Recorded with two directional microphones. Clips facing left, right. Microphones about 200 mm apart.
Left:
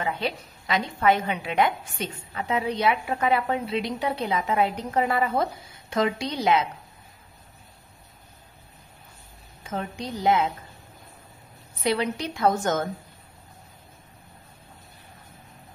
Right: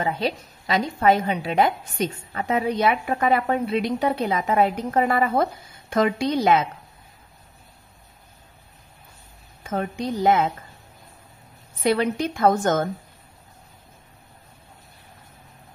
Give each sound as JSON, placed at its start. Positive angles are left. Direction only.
{"t": 0.0, "sound": "a woman's voice", "side_deg": -35}
{"t": 9.6, "sound": "a woman's voice", "side_deg": -50}
{"t": 11.8, "sound": "a woman's voice", "side_deg": -50}